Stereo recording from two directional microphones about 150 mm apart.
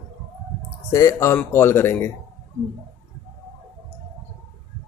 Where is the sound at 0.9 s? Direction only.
20° left (ahead or behind).